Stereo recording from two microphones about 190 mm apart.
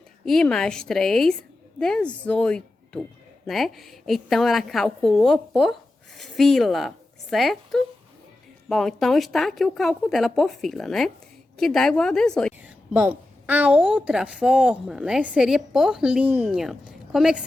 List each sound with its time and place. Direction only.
0.3 s a woman's voice: centre (ahead or behind)
12.6 s a woman's voice: 10° right (ahead or behind)